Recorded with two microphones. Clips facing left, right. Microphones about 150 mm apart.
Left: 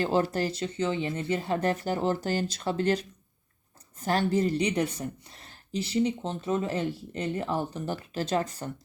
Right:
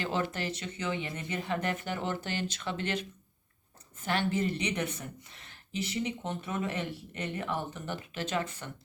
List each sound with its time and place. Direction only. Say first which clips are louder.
0.0 s a woman's voice: left 7 dB; 35° left (ahead or behind)